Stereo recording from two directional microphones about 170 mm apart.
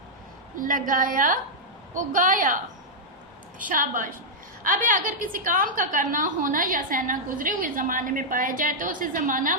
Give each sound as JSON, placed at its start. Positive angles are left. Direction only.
{"t": 0.6, "sound": "a woman's voice", "side_deg": -55}
{"t": 3.6, "sound": "a woman's voice", "side_deg": -50}